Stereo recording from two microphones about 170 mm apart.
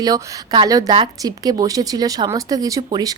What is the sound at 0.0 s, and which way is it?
A woman's voice, 25° right (ahead or behind).